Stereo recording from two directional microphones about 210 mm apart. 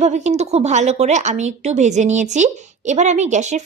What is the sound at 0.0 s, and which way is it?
Speech, 30° right (ahead or behind).